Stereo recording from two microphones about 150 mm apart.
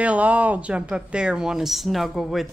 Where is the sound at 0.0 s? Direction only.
10° right (ahead or behind).